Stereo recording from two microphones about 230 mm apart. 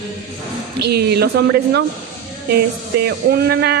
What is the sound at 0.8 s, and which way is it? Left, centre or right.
Speech, right.